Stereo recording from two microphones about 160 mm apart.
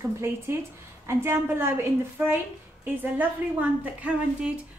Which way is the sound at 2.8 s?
10° right (ahead or behind).